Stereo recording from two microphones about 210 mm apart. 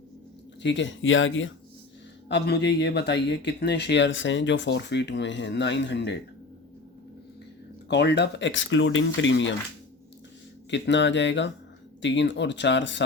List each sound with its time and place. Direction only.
0.6 s speech: 60° left (ahead or behind)
2.3 s speech: 50° left (ahead or behind)
7.9 s speech: 55° left (ahead or behind)
10.7 s speech: 60° left (ahead or behind)